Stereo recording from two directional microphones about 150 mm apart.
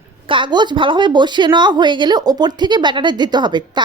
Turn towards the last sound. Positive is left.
turn(degrees=-30)  # may be behind; listen again after turning